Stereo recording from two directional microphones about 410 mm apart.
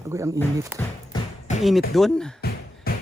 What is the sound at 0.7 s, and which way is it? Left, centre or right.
Speech, centre.